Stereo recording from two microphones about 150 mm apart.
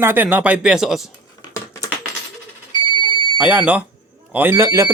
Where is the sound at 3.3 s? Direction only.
10° right (ahead or behind).